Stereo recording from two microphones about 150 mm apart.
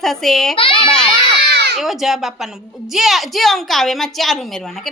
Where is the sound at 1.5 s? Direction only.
90° right.